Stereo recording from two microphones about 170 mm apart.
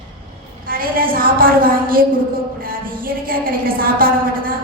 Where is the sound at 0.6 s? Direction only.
55° right (ahead or behind).